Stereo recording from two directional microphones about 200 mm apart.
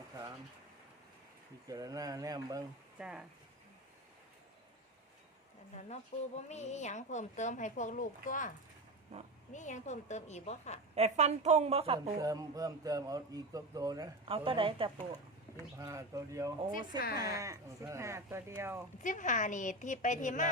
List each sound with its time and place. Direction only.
1.6 s speech: 20° right (ahead or behind)
3.0 s speech: 5° right (ahead or behind)
5.7 s a woman's voice: 35° left (ahead or behind)
10.9 s a woman's voice: 30° right (ahead or behind)
12.2 s speech: 15° right (ahead or behind)
15.8 s speech: 15° right (ahead or behind)
19.0 s a woman's voice: 40° left (ahead or behind)